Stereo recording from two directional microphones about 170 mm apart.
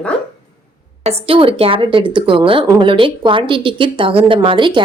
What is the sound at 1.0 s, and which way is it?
A woman's voice, 35° right (ahead or behind).